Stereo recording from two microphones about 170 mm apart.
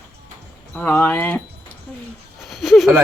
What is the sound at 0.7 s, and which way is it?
Speech, 10° left (ahead or behind).